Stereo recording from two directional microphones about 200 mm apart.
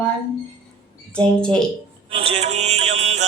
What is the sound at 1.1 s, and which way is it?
Speech, 5° left (ahead or behind).